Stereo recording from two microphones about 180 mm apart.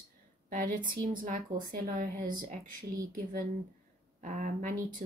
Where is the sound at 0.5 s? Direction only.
50° right (ahead or behind).